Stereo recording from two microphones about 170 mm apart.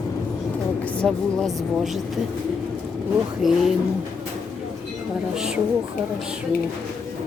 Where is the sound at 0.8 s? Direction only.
5° left (ahead or behind).